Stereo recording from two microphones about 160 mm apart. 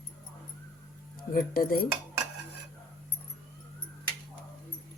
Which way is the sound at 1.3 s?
65° left (ahead or behind).